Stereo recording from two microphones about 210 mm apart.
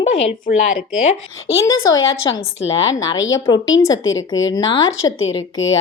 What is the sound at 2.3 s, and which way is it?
A woman's voice, 20° left (ahead or behind).